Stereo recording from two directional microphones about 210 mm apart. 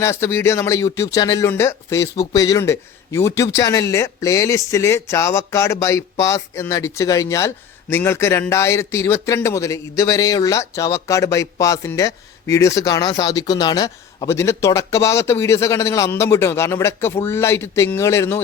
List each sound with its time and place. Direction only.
0.0 s speech: 10° left (ahead or behind)